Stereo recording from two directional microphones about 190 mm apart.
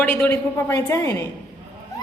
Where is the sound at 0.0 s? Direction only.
10° left (ahead or behind).